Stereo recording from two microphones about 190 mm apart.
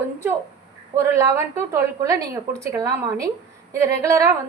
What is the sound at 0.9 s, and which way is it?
A woman's voice, 15° right (ahead or behind).